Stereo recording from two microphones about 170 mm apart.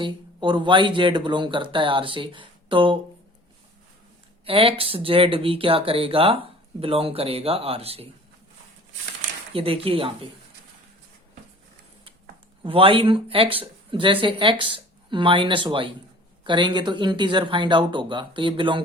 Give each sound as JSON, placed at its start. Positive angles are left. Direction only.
{"t": 0.0, "sound": "speech", "side_deg": -30}
{"t": 4.4, "sound": "speech", "side_deg": -30}
{"t": 9.5, "sound": "speech", "side_deg": -35}
{"t": 12.6, "sound": "speech", "side_deg": -30}